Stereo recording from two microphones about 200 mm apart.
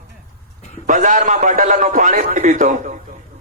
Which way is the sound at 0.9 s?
40° right (ahead or behind).